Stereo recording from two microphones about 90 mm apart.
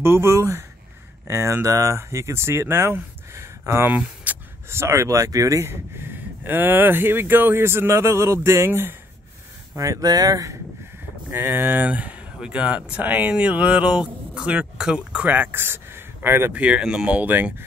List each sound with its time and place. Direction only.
0.0 s speech: 30° right (ahead or behind)
3.9 s speech: 15° right (ahead or behind)
4.6 s speech: 30° right (ahead or behind)
9.8 s speech: 40° right (ahead or behind)
11.3 s speech: 20° right (ahead or behind)
16.6 s speech: 10° right (ahead or behind)